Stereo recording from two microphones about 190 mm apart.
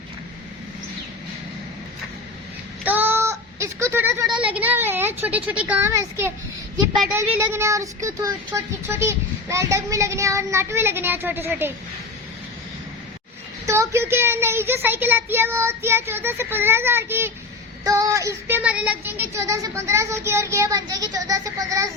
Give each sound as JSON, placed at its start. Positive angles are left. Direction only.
{"t": 2.8, "sound": "child singing", "side_deg": -10}
{"t": 4.4, "sound": "speech", "side_deg": -10}
{"t": 13.7, "sound": "speech", "side_deg": -15}